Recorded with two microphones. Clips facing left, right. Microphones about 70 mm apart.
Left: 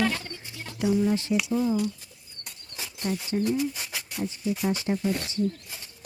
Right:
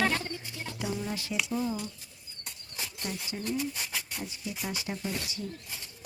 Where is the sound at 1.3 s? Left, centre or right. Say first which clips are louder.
Left 6 dB; centre.